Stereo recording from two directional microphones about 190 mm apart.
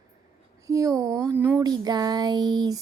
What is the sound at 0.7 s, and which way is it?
Speech, 20° right (ahead or behind).